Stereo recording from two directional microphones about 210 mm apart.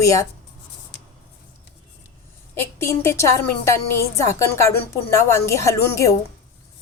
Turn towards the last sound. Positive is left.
turn(degrees=15)  # may be behind; listen again after turning